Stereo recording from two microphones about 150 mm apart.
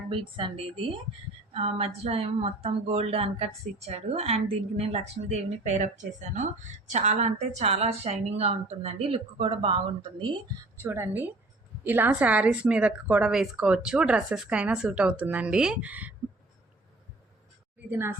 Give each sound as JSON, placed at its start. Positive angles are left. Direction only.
{"t": 0.1, "sound": "a woman's voice", "side_deg": -35}
{"t": 10.8, "sound": "a woman's voice", "side_deg": -15}